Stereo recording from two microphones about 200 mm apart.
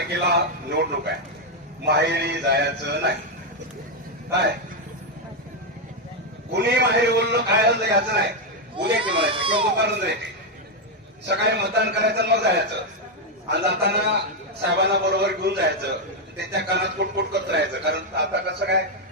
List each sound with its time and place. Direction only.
0.1 s a man's voice: 55° right (ahead or behind)
6.5 s a man's voice: 60° right (ahead or behind)
9.0 s speech: 25° right (ahead or behind)
9.8 s a man's voice: 60° right (ahead or behind)
11.2 s a man's voice: 60° right (ahead or behind)